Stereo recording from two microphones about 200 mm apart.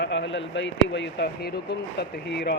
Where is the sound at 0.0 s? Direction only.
65° left (ahead or behind).